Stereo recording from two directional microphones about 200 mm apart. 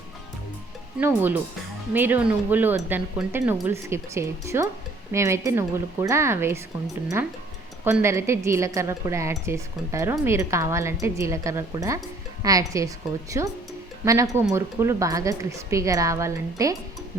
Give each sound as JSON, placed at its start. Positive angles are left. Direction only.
{"t": 0.9, "sound": "speech", "side_deg": -10}
{"t": 7.9, "sound": "speech", "side_deg": -15}
{"t": 14.0, "sound": "speech", "side_deg": -15}